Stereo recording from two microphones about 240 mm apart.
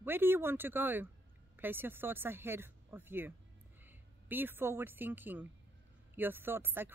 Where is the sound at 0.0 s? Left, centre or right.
Centre.